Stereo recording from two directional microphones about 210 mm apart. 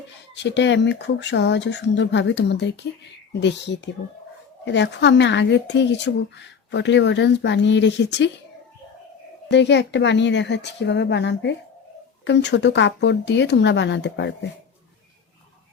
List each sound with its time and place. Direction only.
0.3 s speech: 55° left (ahead or behind)
9.5 s speech: 55° left (ahead or behind)